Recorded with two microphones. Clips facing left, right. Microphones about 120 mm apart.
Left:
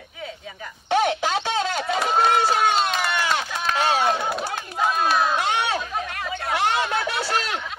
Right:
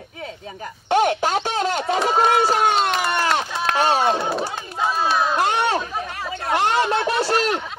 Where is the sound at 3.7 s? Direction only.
35° right (ahead or behind).